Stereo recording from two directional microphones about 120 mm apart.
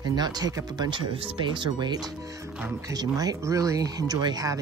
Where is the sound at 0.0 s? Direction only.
35° right (ahead or behind).